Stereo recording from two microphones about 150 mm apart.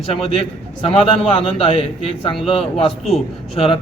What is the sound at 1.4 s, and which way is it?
A man's voice, 40° left (ahead or behind).